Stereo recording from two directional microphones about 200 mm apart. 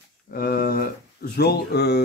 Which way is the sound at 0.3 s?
45° left (ahead or behind).